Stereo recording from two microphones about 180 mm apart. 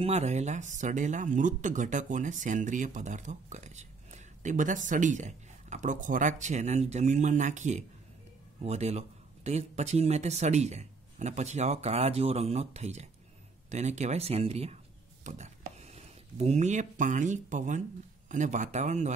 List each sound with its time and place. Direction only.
0.0 s speech: 35° right (ahead or behind)